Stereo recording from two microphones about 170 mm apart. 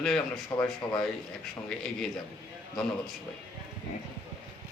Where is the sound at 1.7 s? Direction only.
5° left (ahead or behind).